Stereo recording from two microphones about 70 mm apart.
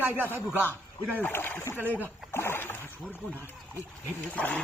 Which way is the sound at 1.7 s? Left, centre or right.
Right.